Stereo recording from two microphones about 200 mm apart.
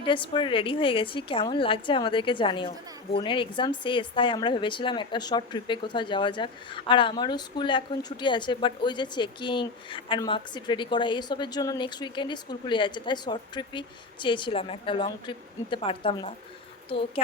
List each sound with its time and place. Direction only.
0.0 s a woman's voice: 25° left (ahead or behind)